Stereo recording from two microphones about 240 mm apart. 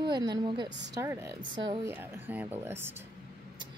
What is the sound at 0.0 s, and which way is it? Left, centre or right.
A woman's voice, centre.